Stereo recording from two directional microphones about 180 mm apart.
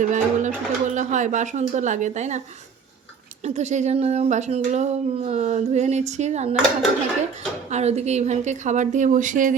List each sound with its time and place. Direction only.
0.0 s speech: 45° right (ahead or behind)
3.4 s speech: 40° right (ahead or behind)
7.7 s speech: 35° right (ahead or behind)